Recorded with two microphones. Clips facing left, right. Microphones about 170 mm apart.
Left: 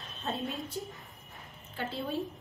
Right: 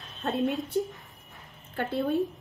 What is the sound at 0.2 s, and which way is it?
Speech, 65° right (ahead or behind).